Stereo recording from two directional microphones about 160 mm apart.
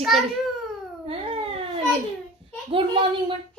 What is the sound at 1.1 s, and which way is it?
Speech, 35° right (ahead or behind).